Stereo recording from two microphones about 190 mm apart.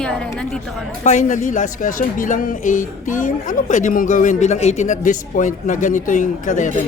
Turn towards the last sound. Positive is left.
turn(degrees=40)  # may be behind; listen again after turning